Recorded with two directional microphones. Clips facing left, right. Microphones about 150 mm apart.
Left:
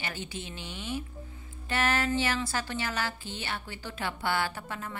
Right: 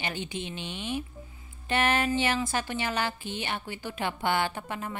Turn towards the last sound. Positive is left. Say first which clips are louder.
# right 3 dB
turn(degrees=-20)  # may be behind; listen again after turning